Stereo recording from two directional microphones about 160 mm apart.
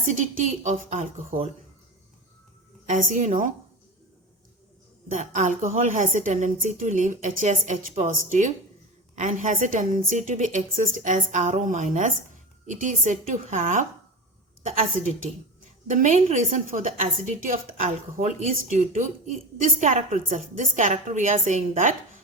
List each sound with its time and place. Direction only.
0.6 s a woman's voice: 50° right (ahead or behind)
2.8 s a woman's voice: 50° right (ahead or behind)
5.0 s a woman's voice: 50° right (ahead or behind)
15.9 s a woman's voice: 50° right (ahead or behind)